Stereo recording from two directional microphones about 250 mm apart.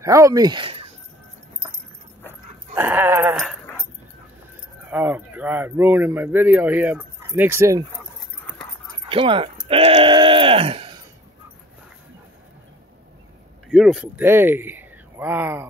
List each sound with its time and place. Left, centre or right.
0.0 s speech: centre
2.7 s a sound: centre
4.9 s speech: centre
9.1 s speech: right
13.7 s speech: centre